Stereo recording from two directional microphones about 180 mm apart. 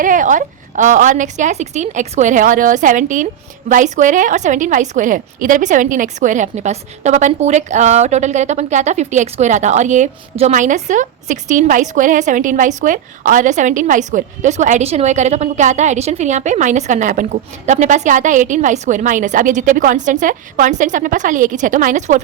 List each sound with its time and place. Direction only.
0.0 s a woman's voice: 45° right (ahead or behind)